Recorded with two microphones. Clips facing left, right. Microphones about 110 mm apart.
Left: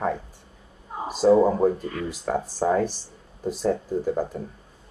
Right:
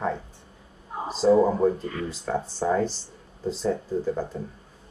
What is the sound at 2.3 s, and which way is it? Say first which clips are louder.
Speech: left 2 dB; 30° left (ahead or behind).